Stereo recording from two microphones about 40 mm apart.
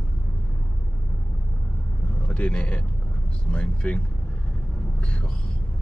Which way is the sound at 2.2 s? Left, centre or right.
Left.